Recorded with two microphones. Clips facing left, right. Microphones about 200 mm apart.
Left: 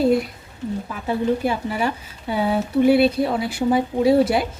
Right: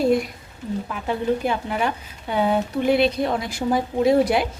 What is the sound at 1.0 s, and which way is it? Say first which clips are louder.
Speech: left 2 dB; 5° left (ahead or behind).